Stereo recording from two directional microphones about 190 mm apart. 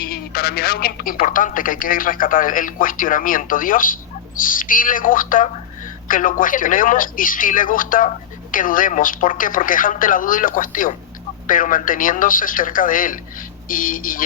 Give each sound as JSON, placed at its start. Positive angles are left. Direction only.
{"t": 0.0, "sound": "speech", "side_deg": 50}